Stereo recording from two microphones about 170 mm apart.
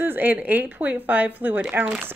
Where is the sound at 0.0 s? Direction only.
10° right (ahead or behind).